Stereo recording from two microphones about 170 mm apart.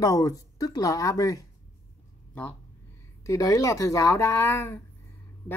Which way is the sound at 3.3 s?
20° left (ahead or behind).